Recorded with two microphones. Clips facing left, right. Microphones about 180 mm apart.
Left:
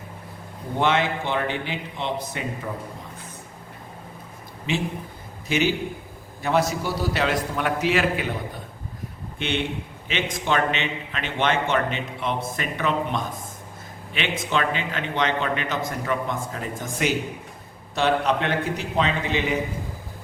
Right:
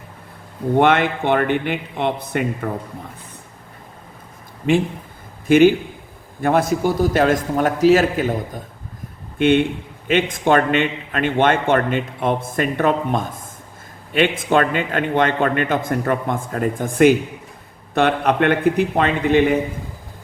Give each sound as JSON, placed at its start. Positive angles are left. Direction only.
{"t": 0.8, "sound": "a man's voice", "side_deg": -55}
{"t": 5.5, "sound": "a man's voice", "side_deg": -50}